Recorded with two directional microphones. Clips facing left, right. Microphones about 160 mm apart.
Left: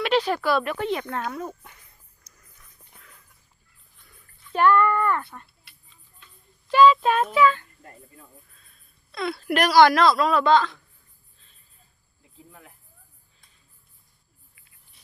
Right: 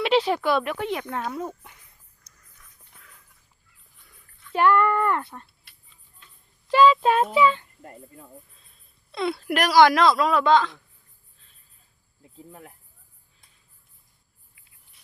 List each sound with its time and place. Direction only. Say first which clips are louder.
0.0 s a sound: right 1 dB; 25° right (ahead or behind)
0.3 s speech: even; 20° right (ahead or behind)
2.3 s a sound: left 1 dB; 5° left (ahead or behind)
3.9 s a sound: left 2 dB; 10° right (ahead or behind)
4.5 s speech: even; 20° right (ahead or behind)
6.7 s child singing: left 1 dB; 30° right (ahead or behind)
9.1 s child singing: right 2 dB; 25° right (ahead or behind)
9.5 s speech: left 1 dB; 10° right (ahead or behind)
12.5 s speech: right 5 dB; 35° right (ahead or behind)